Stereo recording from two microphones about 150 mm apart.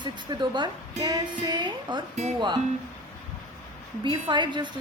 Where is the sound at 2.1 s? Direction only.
45° right (ahead or behind).